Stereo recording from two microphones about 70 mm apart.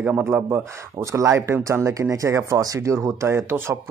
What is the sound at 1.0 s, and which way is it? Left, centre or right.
Speech, right.